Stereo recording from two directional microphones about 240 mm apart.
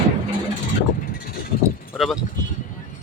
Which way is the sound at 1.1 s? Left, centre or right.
Left.